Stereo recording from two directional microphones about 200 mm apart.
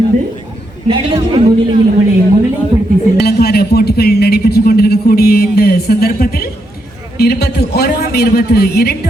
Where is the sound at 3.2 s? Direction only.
50° left (ahead or behind).